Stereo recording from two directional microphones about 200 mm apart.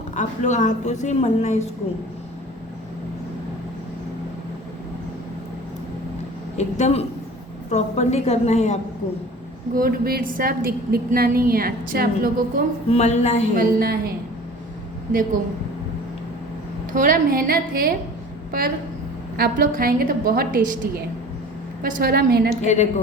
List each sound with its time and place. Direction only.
0.2 s a woman's voice: 35° left (ahead or behind)
6.6 s a woman's voice: 35° left (ahead or behind)
9.7 s a woman's voice: 45° right (ahead or behind)
12.9 s a woman's voice: 35° left (ahead or behind)
13.6 s a woman's voice: 50° right (ahead or behind)
16.9 s a woman's voice: 40° right (ahead or behind)
19.4 s a woman's voice: 45° right (ahead or behind)
22.6 s a woman's voice: 35° left (ahead or behind)